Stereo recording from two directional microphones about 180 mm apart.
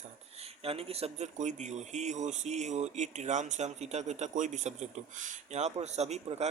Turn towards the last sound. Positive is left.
turn(degrees=-35)  # may be behind; listen again after turning